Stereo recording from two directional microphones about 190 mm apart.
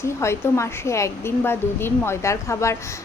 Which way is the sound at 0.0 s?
15° left (ahead or behind).